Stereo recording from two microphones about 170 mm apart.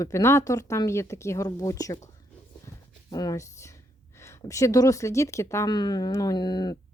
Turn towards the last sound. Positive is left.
turn(degrees=25)  # may be behind; listen again after turning